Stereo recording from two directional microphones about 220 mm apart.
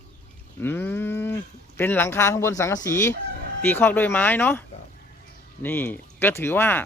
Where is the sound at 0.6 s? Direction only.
10° left (ahead or behind).